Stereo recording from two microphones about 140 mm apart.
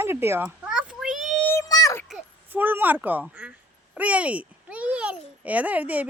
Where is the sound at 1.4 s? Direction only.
20° left (ahead or behind).